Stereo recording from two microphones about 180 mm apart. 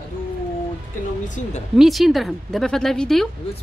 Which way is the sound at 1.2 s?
45° left (ahead or behind).